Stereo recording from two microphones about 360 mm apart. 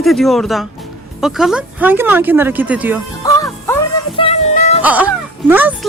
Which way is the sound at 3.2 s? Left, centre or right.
Centre.